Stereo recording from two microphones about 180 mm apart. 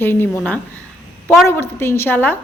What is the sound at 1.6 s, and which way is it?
Speech, 15° left (ahead or behind).